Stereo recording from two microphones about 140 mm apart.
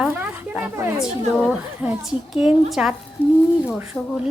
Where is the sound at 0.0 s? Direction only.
10° right (ahead or behind).